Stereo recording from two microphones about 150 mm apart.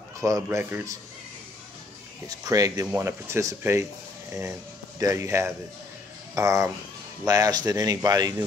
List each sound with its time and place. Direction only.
0.2 s speech: 20° right (ahead or behind)
2.2 s speech: 25° right (ahead or behind)